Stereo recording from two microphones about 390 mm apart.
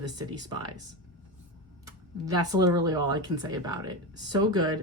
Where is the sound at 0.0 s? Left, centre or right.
Centre.